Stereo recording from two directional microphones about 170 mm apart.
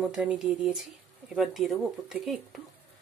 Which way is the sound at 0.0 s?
5° right (ahead or behind).